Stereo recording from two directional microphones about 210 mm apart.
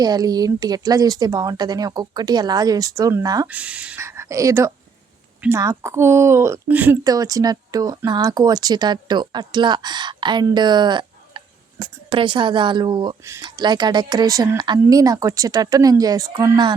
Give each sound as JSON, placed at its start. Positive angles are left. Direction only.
{"t": 0.0, "sound": "speech", "side_deg": -20}